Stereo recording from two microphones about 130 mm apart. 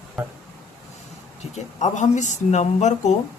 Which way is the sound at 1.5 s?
65° left (ahead or behind).